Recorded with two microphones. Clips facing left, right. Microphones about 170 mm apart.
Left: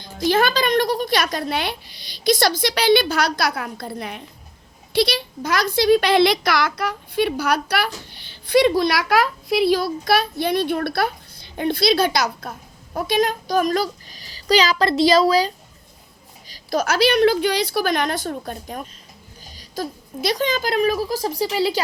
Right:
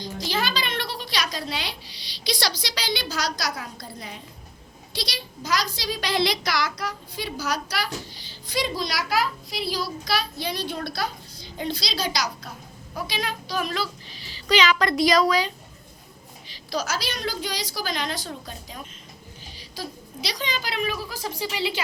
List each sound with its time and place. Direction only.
0.0 s a woman's voice: 55° left (ahead or behind); by 15.5 s 35° left (ahead or behind)
16.5 s a woman's voice: 50° left (ahead or behind)